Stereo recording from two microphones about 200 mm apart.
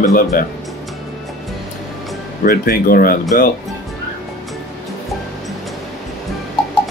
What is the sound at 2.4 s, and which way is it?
Speech, 45° left (ahead or behind).